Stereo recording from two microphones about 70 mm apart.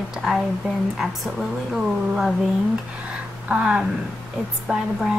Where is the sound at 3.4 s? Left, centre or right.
Centre.